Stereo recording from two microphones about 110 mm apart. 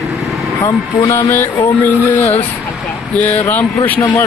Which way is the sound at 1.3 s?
20° left (ahead or behind).